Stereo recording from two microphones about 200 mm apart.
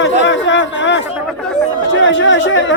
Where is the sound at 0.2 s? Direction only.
65° left (ahead or behind).